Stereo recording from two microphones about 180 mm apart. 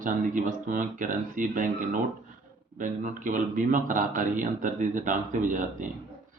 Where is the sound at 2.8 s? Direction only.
45° right (ahead or behind).